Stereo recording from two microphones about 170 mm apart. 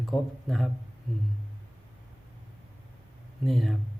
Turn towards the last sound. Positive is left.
turn(degrees=0)  # may be behind; listen again after turning